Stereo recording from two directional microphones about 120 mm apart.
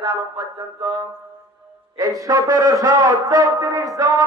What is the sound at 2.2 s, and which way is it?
A man's voice, 30° right (ahead or behind).